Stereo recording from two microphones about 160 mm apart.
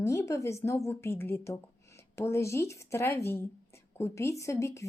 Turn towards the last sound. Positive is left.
turn(degrees=20)  # may be behind; listen again after turning